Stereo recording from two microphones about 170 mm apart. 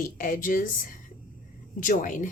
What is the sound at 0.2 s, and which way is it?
A woman's voice, 50° left (ahead or behind).